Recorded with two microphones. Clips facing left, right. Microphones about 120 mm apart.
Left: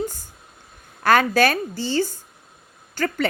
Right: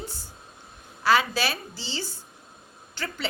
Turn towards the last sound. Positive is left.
turn(degrees=45)  # may be behind; listen again after turning